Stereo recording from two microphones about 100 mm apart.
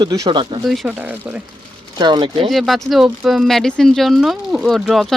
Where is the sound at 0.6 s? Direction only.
Centre (ahead or behind).